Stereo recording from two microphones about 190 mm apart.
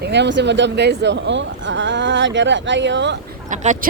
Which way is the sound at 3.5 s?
40° right (ahead or behind).